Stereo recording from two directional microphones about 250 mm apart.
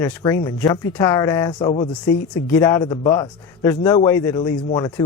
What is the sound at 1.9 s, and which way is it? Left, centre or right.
Speech, centre.